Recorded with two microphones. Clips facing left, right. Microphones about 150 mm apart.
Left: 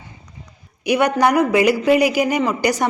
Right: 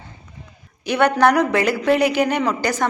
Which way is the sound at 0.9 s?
10° left (ahead or behind).